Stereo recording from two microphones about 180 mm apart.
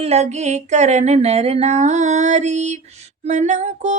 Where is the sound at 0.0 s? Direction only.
35° right (ahead or behind).